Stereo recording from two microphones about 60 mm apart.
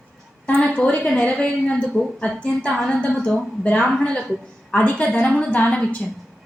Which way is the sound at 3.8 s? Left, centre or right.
Centre.